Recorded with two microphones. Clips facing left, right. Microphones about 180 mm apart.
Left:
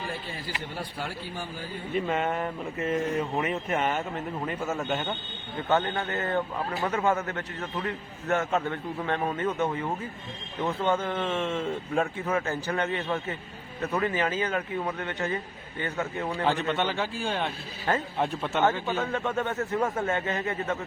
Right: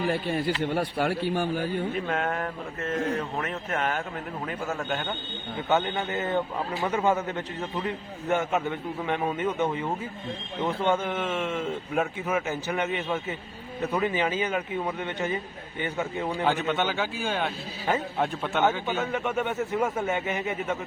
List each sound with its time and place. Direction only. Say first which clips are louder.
0.1 s speech: right 9 dB; 65° right (ahead or behind)
1.9 s speech: left 1 dB; centre (ahead or behind)
5.6 s a man's voice: even; 10° right (ahead or behind)
16.3 s speech: right 1 dB; centre (ahead or behind)
19.1 s a man's voice: right 1 dB; 15° right (ahead or behind)